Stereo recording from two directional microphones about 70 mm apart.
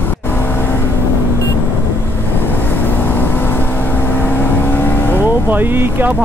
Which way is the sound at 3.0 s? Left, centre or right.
Left.